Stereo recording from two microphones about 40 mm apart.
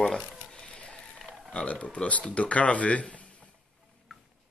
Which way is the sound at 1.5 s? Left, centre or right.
Left.